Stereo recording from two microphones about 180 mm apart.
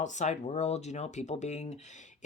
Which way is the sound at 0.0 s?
40° left (ahead or behind).